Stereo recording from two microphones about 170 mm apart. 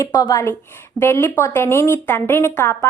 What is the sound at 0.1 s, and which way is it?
A woman's voice, 20° left (ahead or behind).